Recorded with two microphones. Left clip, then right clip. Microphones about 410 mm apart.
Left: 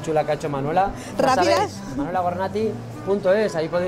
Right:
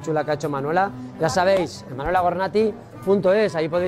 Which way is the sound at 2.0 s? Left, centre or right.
Right.